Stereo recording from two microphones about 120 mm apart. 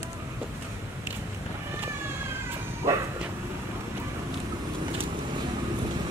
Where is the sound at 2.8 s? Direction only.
25° right (ahead or behind).